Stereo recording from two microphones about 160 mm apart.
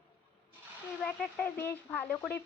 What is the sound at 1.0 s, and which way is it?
Speech, 5° left (ahead or behind).